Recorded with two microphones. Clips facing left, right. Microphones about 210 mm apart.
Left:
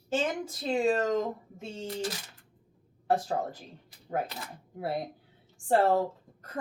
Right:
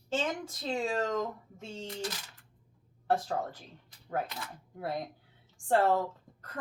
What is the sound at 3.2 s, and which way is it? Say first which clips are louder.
Speech: left 3 dB; 25° left (ahead or behind).